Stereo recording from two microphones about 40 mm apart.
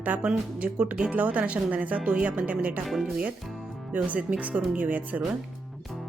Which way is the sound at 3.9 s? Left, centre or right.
Right.